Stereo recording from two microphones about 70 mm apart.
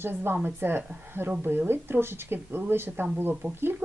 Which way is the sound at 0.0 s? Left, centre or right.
Right.